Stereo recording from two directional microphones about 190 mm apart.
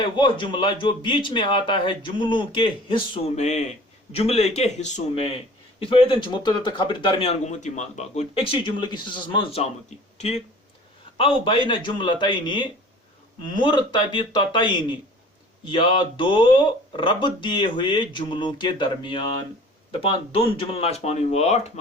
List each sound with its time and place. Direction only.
0.0 s a man's voice: 25° left (ahead or behind)
3.2 s a man's voice: 35° left (ahead or behind)
5.8 s a man's voice: 25° left (ahead or behind)